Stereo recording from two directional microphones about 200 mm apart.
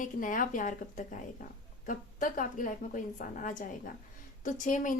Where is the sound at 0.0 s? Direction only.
40° left (ahead or behind).